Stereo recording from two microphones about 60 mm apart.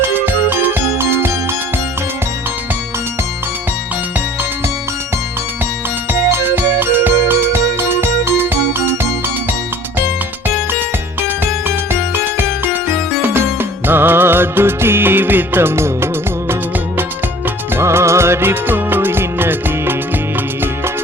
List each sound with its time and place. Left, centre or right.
0.0 s music: right
6.3 s music: right
11.9 s music: right
17.7 s music: right